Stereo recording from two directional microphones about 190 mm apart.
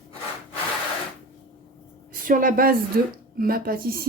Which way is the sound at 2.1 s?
45° right (ahead or behind).